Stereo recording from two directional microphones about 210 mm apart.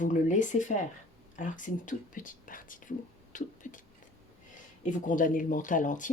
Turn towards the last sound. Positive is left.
turn(degrees=40)  # may be behind; listen again after turning